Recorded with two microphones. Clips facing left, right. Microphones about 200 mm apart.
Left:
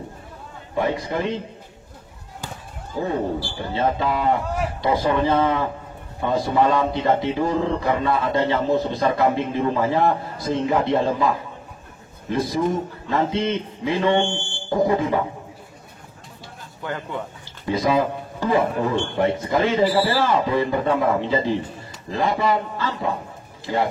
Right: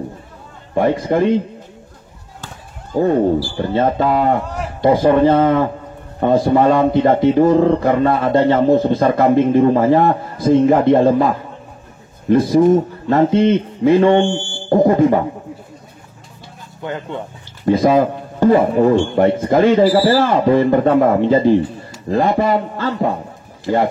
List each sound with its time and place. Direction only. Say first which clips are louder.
0.7 s speech: right 8 dB; 50° right (ahead or behind)
3.5 s speech: right 7 dB; 50° right (ahead or behind)
16.8 s speech: right 4 dB; 20° right (ahead or behind)
17.6 s speech: right 7 dB; 50° right (ahead or behind)